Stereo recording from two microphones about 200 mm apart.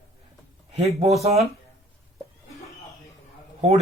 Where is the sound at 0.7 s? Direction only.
30° right (ahead or behind).